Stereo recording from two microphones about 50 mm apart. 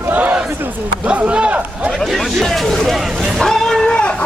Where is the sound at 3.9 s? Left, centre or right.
Centre.